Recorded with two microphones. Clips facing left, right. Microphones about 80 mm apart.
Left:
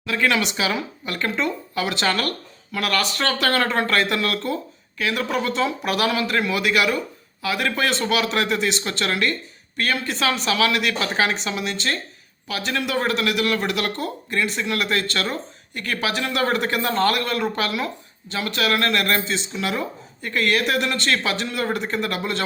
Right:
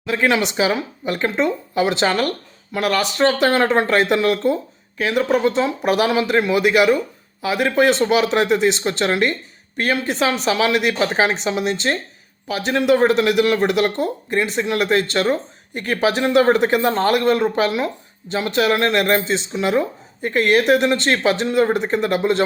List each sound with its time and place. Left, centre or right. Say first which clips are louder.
0.0 s speech: right 3 dB; right